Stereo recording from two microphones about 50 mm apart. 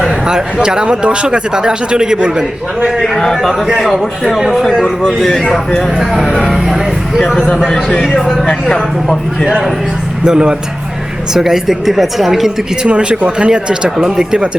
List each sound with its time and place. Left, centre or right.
0.3 s speech: centre
3.0 s a man's voice: centre
3.7 s a woman's voice: centre
3.9 s a man's voice: centre
4.4 s a woman's voice: centre
4.6 s a man's voice: centre
7.5 s a woman's voice: centre
8.4 s a man's voice: centre
10.2 s a woman's voice: centre
12.9 s speech: right